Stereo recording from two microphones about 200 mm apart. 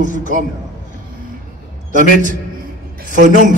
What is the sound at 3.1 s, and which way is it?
Speech, 40° right (ahead or behind).